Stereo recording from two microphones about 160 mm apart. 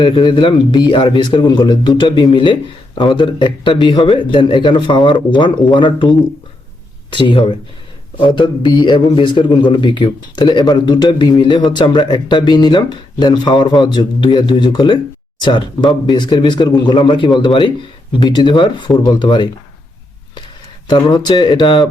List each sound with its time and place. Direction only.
0.0 s a man's voice: 30° left (ahead or behind)
20.8 s a man's voice: 25° left (ahead or behind)